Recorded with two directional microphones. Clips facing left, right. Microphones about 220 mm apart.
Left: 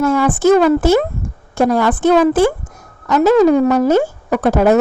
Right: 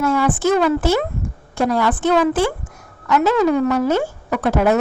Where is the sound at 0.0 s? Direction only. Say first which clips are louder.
Left 4 dB; 45° left (ahead or behind).